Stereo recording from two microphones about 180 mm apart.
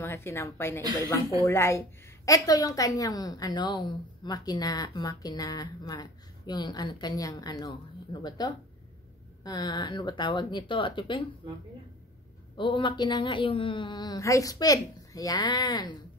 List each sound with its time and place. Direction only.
0.0 s a woman's voice: 15° left (ahead or behind)
12.5 s a woman's voice: 25° left (ahead or behind)